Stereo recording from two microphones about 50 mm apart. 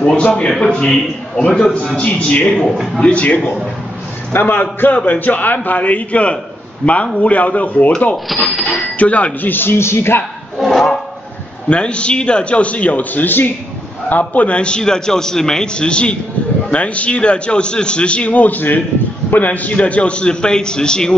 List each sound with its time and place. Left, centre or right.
0.0 s a man's voice: left
2.0 s a man's voice: left
2.7 s a man's voice: centre
3.0 s a man's voice: left
4.3 s a man's voice: left
8.3 s a sound: centre
8.7 s speech: left
9.5 s speech: left
10.6 s a sound: centre
11.7 s a man's voice: left